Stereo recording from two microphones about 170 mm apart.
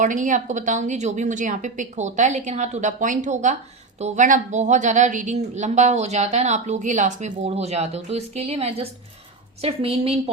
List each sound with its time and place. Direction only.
0.0 s a woman's voice: 50° right (ahead or behind)